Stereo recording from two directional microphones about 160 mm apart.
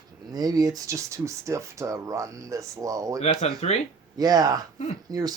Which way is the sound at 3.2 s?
45° left (ahead or behind).